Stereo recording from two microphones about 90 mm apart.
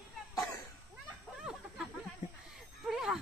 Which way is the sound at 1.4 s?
10° right (ahead or behind).